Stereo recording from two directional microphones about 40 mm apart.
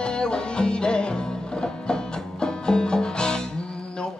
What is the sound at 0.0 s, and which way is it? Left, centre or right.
Music, left.